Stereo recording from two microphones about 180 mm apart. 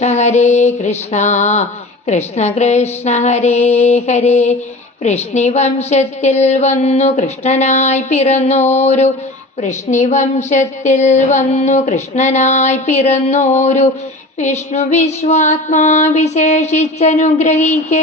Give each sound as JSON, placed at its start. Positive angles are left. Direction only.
{"t": 0.0, "sound": "speech", "side_deg": 40}